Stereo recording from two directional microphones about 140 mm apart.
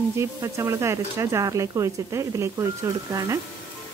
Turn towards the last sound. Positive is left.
turn(degrees=-25)  # may be behind; listen again after turning